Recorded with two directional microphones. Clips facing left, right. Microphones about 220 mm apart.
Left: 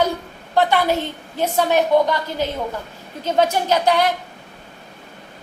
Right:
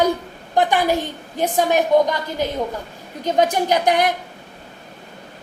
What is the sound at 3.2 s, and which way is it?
Speech, 15° right (ahead or behind).